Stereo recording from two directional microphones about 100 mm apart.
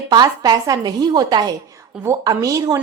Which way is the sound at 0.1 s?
45° right (ahead or behind).